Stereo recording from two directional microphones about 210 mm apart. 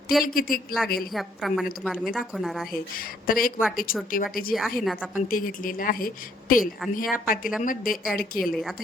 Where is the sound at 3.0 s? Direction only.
45° left (ahead or behind).